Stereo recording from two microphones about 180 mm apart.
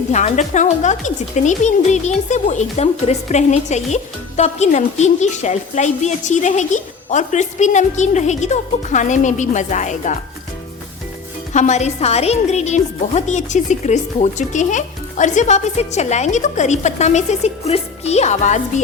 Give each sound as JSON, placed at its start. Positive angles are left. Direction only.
{"t": 0.1, "sound": "speech", "side_deg": 40}
{"t": 11.5, "sound": "speech", "side_deg": 40}